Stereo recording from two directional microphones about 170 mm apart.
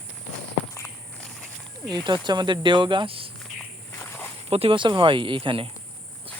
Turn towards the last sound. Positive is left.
turn(degrees=-30)  # may be behind; listen again after turning